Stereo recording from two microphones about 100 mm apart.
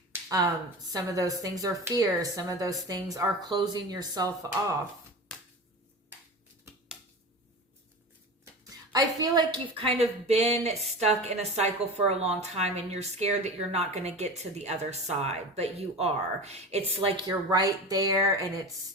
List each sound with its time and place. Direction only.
0.9 s a woman's voice: 35° right (ahead or behind)
8.6 s a woman's voice: 40° right (ahead or behind); by 17.2 s 85° right
17.2 s a woman's voice: 45° right (ahead or behind)